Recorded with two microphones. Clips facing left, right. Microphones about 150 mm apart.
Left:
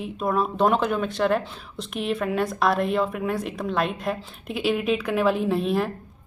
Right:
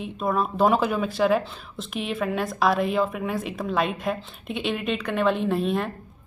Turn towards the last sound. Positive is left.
turn(degrees=0)  # may be behind; listen again after turning